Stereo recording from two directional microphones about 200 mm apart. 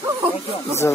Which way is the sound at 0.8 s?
10° left (ahead or behind).